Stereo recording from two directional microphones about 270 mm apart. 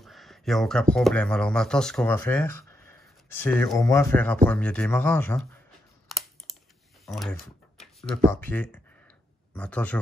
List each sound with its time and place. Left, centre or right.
0.0 s speech: centre
6.0 s computer keyboard: centre
7.1 s speech: centre